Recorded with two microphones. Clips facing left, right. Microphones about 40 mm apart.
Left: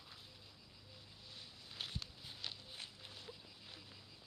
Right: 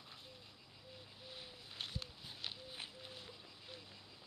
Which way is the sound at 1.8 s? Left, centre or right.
Centre.